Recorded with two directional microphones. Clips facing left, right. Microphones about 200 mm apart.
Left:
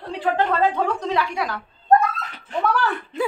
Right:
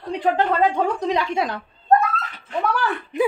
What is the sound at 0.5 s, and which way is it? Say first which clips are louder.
A woman's voice: right 1 dB; 15° right (ahead or behind).